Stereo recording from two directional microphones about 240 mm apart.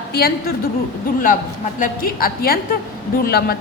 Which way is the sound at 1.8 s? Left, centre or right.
Left.